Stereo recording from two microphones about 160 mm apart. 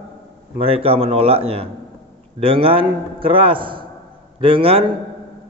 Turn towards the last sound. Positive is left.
turn(degrees=-35)  # may be behind; listen again after turning